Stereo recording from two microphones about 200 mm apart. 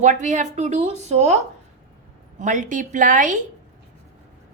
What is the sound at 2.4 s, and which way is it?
Speech, 40° right (ahead or behind).